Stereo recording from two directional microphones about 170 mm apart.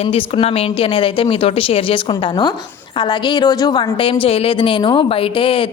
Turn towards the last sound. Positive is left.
turn(degrees=30)  # may be behind; listen again after turning